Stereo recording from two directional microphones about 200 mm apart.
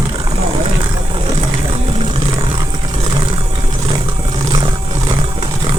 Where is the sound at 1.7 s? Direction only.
30° right (ahead or behind).